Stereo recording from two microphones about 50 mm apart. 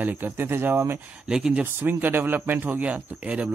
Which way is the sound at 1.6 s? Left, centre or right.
Right.